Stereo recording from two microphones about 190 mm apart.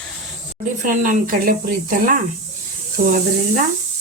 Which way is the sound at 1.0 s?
45° right (ahead or behind).